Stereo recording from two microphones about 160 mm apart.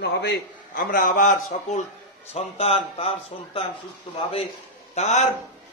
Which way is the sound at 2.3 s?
40° left (ahead or behind).